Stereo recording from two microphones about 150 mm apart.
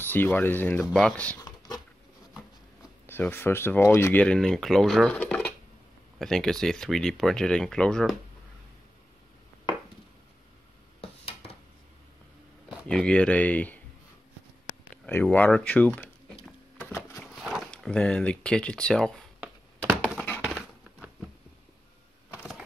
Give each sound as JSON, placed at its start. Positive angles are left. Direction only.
{"t": 0.0, "sound": "speech", "side_deg": 10}
{"t": 0.7, "sound": "speech", "side_deg": 0}
{"t": 1.4, "sound": "dog", "side_deg": 25}
{"t": 3.1, "sound": "speech", "side_deg": 15}
{"t": 11.0, "sound": "a sound", "side_deg": 45}
{"t": 12.6, "sound": "speech", "side_deg": 5}
{"t": 14.9, "sound": "speech", "side_deg": 10}
{"t": 16.7, "sound": "a sound", "side_deg": 15}
{"t": 17.2, "sound": "speech", "side_deg": 0}
{"t": 20.4, "sound": "a sound", "side_deg": -5}